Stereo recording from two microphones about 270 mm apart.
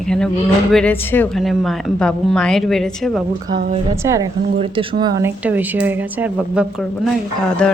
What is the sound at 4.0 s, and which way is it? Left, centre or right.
A woman's voice, centre.